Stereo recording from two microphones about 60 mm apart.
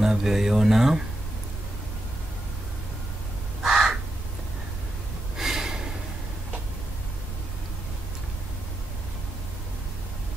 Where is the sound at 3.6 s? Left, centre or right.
Centre.